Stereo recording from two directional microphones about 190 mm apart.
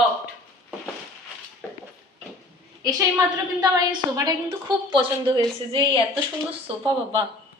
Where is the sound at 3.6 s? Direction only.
20° right (ahead or behind).